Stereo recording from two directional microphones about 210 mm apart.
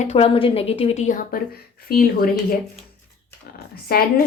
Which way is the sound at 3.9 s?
45° left (ahead or behind).